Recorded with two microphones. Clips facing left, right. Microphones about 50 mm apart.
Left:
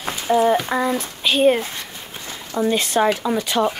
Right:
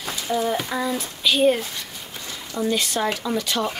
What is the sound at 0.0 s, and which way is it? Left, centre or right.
A child's voice, left.